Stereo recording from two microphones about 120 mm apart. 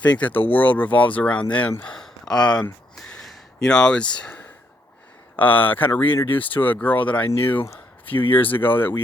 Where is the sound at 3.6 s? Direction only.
5° left (ahead or behind).